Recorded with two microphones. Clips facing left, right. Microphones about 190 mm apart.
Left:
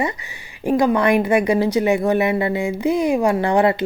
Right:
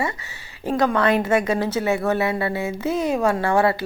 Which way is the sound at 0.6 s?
15° left (ahead or behind).